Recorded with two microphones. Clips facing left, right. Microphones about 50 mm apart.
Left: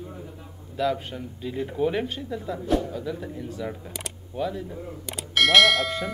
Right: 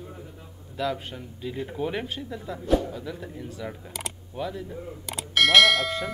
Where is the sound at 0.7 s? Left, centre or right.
Centre.